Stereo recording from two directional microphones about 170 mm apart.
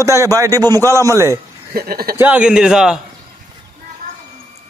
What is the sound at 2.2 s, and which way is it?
Speech, 10° right (ahead or behind).